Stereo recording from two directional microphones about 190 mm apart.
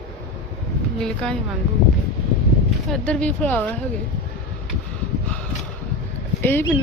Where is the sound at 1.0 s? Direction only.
5° left (ahead or behind).